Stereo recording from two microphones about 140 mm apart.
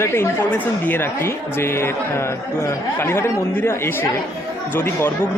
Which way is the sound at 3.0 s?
20° left (ahead or behind).